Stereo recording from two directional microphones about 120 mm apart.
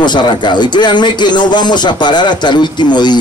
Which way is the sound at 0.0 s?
40° left (ahead or behind).